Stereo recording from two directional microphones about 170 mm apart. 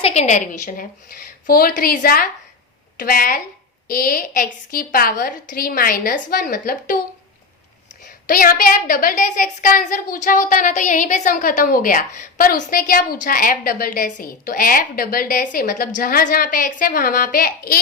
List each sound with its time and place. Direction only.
0.0 s a woman's voice: 40° left (ahead or behind)
8.3 s a woman's voice: 60° left (ahead or behind)